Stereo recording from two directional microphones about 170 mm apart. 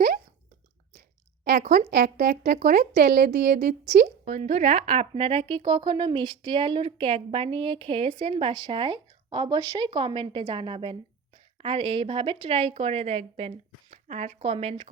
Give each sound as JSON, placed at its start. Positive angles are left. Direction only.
{"t": 1.7, "sound": "speech", "side_deg": -75}
{"t": 2.0, "sound": "speech", "side_deg": -60}
{"t": 4.0, "sound": "speech", "side_deg": -45}